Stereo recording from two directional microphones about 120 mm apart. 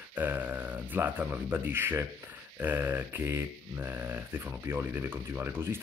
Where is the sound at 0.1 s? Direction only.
15° right (ahead or behind).